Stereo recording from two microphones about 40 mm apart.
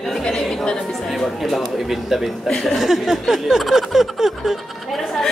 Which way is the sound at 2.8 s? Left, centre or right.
Centre.